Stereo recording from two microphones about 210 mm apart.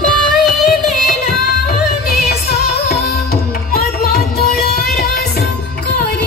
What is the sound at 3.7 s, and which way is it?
Music, 45° left (ahead or behind).